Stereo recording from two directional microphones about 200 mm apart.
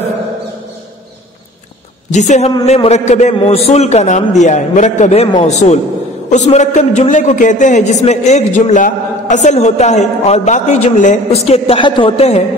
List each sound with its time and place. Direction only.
2.0 s a man's voice: 35° left (ahead or behind)